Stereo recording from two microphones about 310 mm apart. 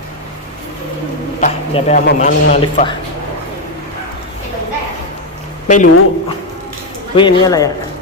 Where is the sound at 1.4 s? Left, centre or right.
Left.